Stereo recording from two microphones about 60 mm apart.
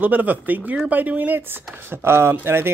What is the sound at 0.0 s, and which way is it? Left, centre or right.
Speech, right.